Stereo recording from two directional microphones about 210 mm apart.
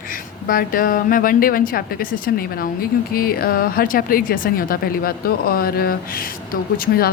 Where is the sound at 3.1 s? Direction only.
45° left (ahead or behind).